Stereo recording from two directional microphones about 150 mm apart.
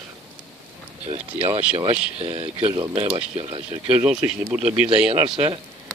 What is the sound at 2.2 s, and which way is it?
Speech, 40° right (ahead or behind).